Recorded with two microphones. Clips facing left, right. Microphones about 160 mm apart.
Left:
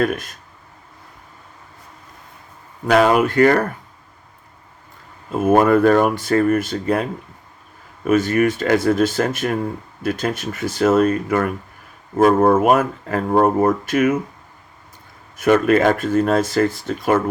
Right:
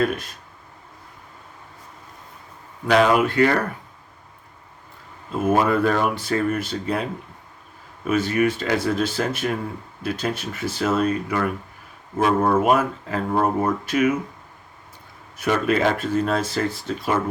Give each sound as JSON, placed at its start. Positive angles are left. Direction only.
{"t": 0.0, "sound": "speech", "side_deg": 45}
{"t": 2.8, "sound": "speech", "side_deg": 45}
{"t": 5.3, "sound": "speech", "side_deg": 50}
{"t": 8.0, "sound": "speech", "side_deg": 50}
{"t": 15.4, "sound": "speech", "side_deg": 50}